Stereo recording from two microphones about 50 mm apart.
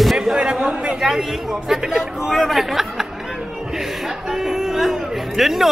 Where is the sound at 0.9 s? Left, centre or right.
Centre.